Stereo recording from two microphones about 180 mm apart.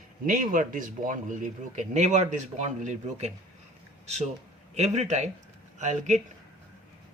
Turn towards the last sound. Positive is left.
turn(degrees=-40)  # may be behind; listen again after turning